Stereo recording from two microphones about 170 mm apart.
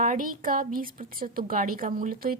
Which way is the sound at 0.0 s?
50° right (ahead or behind).